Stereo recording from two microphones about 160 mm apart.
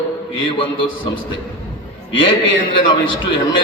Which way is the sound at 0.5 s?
35° left (ahead or behind).